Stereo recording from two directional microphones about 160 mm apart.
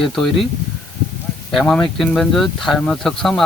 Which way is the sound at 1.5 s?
5° left (ahead or behind).